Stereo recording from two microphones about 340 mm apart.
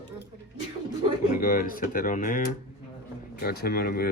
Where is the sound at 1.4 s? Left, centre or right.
Left.